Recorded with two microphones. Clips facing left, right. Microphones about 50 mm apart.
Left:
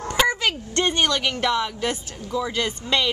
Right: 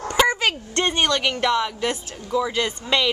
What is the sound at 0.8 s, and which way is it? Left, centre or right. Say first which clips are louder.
A woman's voice: right 1 dB; centre.